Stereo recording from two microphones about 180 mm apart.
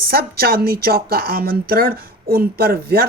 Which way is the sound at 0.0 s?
55° right (ahead or behind).